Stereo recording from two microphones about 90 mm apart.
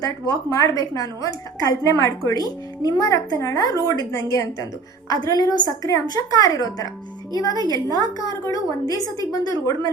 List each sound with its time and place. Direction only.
0.0 s a woman's voice: 40° left (ahead or behind)
5.1 s a woman's voice: 45° left (ahead or behind)